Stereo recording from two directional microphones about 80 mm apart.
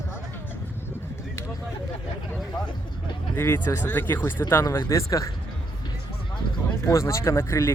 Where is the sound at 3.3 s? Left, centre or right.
Left.